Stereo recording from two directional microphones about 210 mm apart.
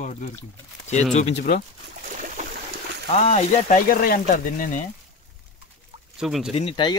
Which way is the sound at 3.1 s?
30° left (ahead or behind).